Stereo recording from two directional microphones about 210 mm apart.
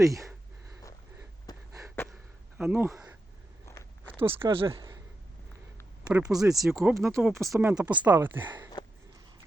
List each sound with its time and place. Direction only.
0.0 s speech: 15° right (ahead or behind)
1.5 s a sound: 20° left (ahead or behind)
2.6 s speech: 5° right (ahead or behind)
3.7 s a sound: 15° left (ahead or behind)
4.4 s speech: 25° right (ahead or behind)
6.1 s speech: 5° right (ahead or behind)
8.4 s speech: 20° right (ahead or behind)